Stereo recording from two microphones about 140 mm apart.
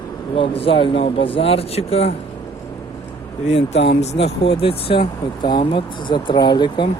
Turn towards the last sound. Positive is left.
turn(degrees=30)  # may be behind; listen again after turning